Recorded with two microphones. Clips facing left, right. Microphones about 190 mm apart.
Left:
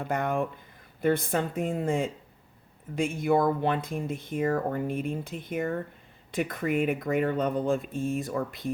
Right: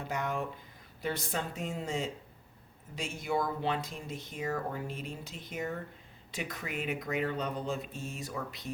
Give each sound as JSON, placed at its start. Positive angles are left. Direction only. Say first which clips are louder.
{"t": 0.0, "sound": "speech", "louder": "left 7 dB", "side_deg": 55}